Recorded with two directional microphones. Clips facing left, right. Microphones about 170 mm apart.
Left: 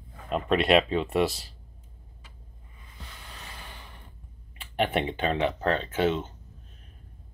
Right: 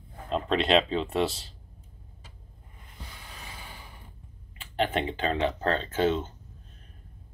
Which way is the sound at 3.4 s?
10° right (ahead or behind).